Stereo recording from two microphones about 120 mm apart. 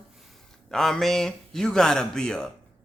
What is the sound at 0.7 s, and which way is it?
Speech, 5° left (ahead or behind).